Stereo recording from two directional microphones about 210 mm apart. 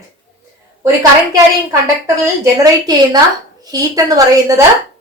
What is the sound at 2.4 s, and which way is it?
A woman's voice, 20° right (ahead or behind).